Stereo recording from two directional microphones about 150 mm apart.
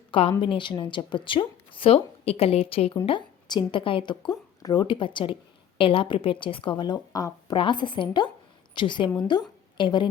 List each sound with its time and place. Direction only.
0.1 s a woman's voice: 35° left (ahead or behind)